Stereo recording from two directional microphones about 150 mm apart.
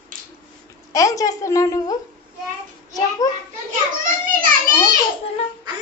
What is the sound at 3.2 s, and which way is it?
Speech, 25° left (ahead or behind).